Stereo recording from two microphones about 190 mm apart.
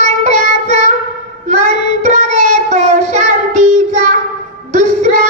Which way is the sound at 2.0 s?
40° right (ahead or behind).